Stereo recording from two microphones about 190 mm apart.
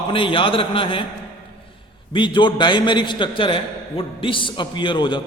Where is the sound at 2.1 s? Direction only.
25° left (ahead or behind).